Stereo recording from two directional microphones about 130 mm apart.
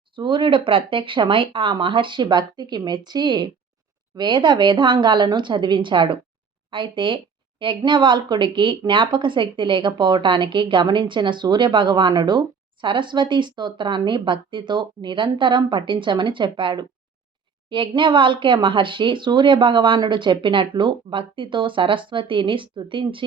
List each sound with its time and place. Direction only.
0.2 s speech: 40° right (ahead or behind)